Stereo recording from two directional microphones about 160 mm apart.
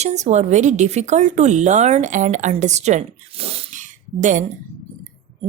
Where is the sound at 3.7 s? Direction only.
50° right (ahead or behind).